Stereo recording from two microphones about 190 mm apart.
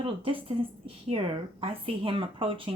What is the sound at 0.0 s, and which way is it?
Speech, 30° right (ahead or behind).